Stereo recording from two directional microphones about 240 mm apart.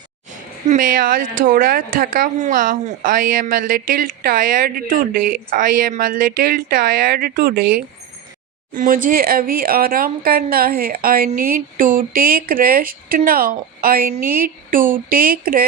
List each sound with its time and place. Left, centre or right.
0.3 s speech: right
8.7 s speech: right